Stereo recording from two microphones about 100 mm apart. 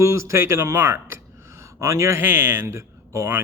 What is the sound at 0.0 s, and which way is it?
A man's voice, 25° right (ahead or behind).